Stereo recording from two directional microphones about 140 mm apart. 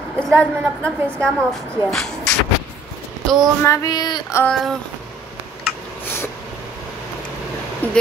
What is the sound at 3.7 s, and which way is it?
Child singing, 25° left (ahead or behind).